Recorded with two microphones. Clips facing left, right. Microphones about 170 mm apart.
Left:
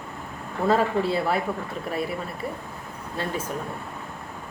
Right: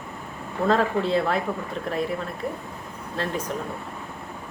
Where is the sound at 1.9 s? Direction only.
5° left (ahead or behind).